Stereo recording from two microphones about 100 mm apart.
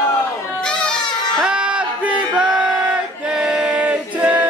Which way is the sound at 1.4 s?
10° right (ahead or behind).